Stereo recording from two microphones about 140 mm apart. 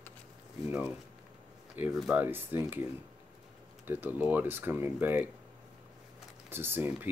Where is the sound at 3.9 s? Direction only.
15° right (ahead or behind).